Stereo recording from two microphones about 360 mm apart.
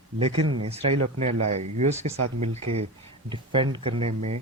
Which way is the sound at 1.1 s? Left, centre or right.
Centre.